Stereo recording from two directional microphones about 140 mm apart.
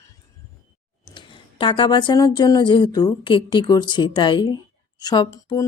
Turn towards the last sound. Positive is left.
turn(degrees=25)  # may be behind; listen again after turning